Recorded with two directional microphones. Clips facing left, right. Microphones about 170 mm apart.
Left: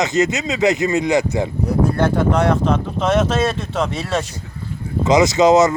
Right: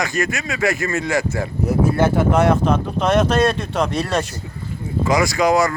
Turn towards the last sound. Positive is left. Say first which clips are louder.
# left 4 dB
turn(degrees=20)  # may be behind; listen again after turning